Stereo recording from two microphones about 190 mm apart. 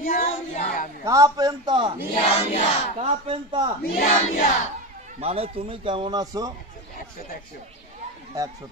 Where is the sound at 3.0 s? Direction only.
30° right (ahead or behind).